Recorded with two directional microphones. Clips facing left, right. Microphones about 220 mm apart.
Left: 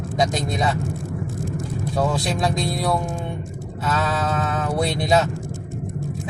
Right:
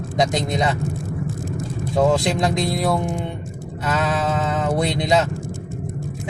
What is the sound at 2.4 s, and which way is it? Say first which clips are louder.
Speech: right 2 dB; 20° right (ahead or behind).